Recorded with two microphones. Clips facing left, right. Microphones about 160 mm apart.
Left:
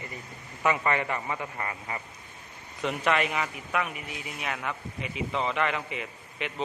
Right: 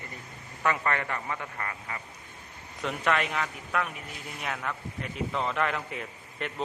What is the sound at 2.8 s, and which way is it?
Speech, centre (ahead or behind).